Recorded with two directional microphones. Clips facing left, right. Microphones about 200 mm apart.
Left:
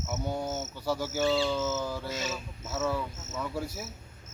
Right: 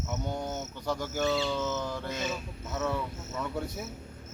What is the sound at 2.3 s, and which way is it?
Cricket, 5° left (ahead or behind).